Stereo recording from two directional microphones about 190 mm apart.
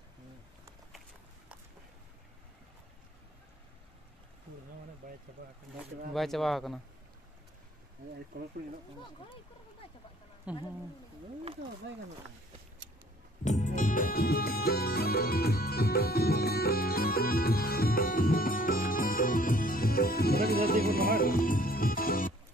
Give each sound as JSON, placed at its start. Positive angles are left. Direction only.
{"t": 5.4, "sound": "speech", "side_deg": -50}
{"t": 6.1, "sound": "speech", "side_deg": 0}
{"t": 10.5, "sound": "speech", "side_deg": -5}
{"t": 13.4, "sound": "music", "side_deg": 40}